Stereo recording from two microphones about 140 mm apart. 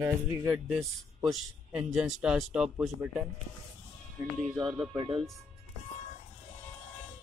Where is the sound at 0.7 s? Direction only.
Centre (ahead or behind).